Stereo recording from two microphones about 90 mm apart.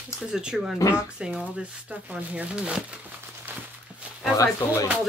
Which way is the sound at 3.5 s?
20° right (ahead or behind).